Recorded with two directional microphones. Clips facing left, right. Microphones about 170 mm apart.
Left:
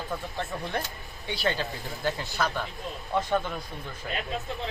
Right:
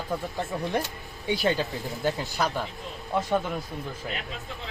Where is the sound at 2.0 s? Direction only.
15° right (ahead or behind).